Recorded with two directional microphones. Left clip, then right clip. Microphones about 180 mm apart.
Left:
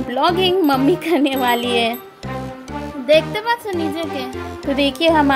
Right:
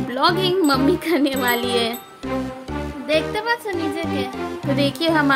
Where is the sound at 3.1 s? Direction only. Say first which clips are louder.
Left 5 dB; 25° left (ahead or behind).